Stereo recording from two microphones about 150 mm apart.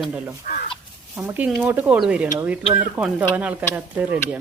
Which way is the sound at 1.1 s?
10° right (ahead or behind).